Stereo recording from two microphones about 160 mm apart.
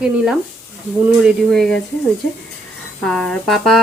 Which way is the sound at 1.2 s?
Centre (ahead or behind).